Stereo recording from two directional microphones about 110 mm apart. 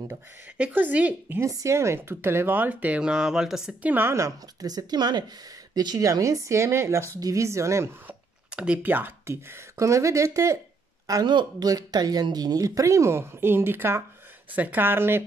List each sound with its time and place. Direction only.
0.1 s speech: 15° right (ahead or behind)
1.4 s speech: 30° right (ahead or behind); by 3.9 s 5° right (ahead or behind)
3.9 s speech: 25° right (ahead or behind)
8.1 s speech: 10° right (ahead or behind); by 10.6 s 25° right (ahead or behind)
11.1 s speech: 40° right (ahead or behind); by 15.2 s 20° right (ahead or behind)